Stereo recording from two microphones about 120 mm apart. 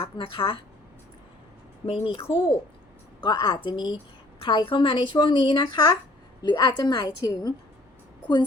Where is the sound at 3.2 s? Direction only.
35° left (ahead or behind).